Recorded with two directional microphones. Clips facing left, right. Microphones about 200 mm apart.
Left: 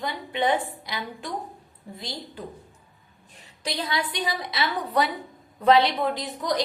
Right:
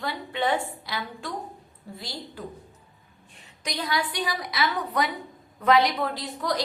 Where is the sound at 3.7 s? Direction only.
25° left (ahead or behind).